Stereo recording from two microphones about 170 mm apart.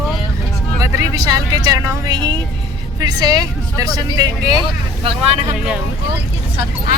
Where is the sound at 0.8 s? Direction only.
20° right (ahead or behind).